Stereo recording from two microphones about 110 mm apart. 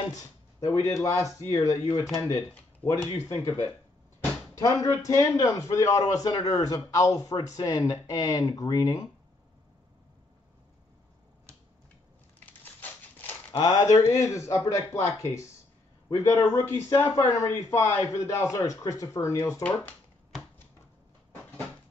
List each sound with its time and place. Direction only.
0.6 s speech: 30° left (ahead or behind)
2.8 s speech: 10° left (ahead or behind)
3.2 s a man's voice: 30° left (ahead or behind)
13.6 s speech: 35° left (ahead or behind)
19.6 s speech: 15° left (ahead or behind)